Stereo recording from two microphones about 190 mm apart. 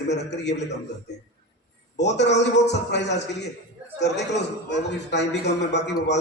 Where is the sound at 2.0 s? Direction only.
65° left (ahead or behind).